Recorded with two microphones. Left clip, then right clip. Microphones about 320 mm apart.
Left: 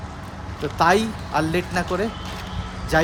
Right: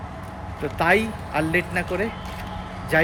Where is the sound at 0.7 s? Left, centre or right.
Centre.